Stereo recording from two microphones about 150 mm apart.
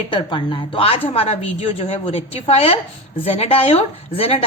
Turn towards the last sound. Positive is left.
turn(degrees=40)  # may be behind; listen again after turning